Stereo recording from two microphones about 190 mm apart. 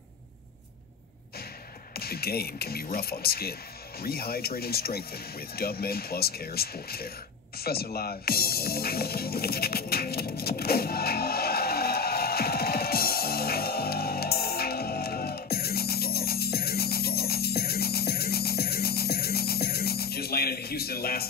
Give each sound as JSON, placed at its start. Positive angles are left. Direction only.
{"t": 2.0, "sound": "speech", "side_deg": 55}
{"t": 7.5, "sound": "music", "side_deg": 55}